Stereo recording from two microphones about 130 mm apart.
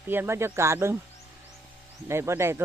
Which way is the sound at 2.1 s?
20° right (ahead or behind).